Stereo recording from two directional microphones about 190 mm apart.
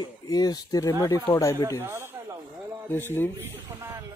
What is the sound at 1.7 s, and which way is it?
Speech, 10° right (ahead or behind).